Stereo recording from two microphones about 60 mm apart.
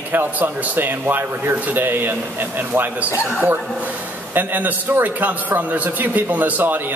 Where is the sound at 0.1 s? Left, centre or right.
Right.